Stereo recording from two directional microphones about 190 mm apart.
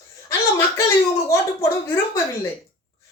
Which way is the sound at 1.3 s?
15° left (ahead or behind).